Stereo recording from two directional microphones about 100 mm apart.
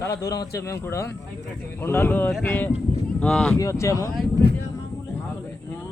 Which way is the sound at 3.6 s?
30° left (ahead or behind).